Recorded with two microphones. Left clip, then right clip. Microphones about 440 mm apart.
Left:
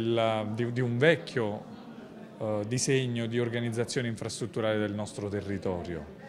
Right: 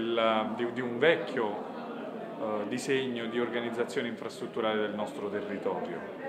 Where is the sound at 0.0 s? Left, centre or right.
Left.